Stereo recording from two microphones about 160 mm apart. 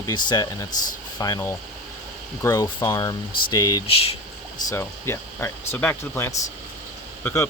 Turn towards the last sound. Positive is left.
turn(degrees=10)  # may be behind; listen again after turning